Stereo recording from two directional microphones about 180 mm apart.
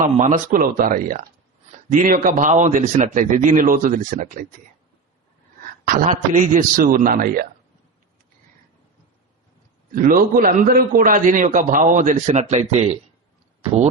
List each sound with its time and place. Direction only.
0.0 s a man's voice: 45° right (ahead or behind)
5.8 s a man's voice: 50° right (ahead or behind)
9.9 s a man's voice: 50° right (ahead or behind)